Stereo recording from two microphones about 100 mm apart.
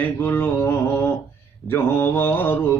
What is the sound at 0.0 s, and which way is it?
Mantra, 20° left (ahead or behind).